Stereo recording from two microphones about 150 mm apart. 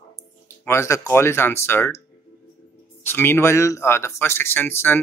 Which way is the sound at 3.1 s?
15° left (ahead or behind).